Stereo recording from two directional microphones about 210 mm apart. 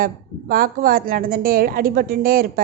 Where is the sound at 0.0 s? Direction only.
45° right (ahead or behind).